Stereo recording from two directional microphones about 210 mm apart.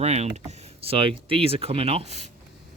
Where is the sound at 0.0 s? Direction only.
30° right (ahead or behind).